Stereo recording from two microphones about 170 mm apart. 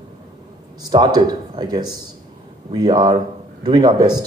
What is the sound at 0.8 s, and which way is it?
Speech, 25° right (ahead or behind).